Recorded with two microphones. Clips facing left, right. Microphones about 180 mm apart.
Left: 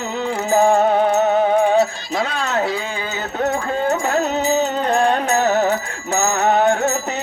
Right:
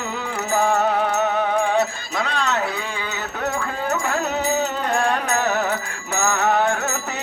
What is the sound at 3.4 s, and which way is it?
Music, 35° left (ahead or behind).